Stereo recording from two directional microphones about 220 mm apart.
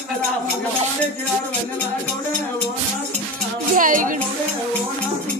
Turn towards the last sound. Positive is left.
turn(degrees=-35)  # may be behind; listen again after turning